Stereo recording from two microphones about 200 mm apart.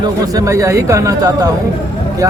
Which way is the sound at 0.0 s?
15° right (ahead or behind).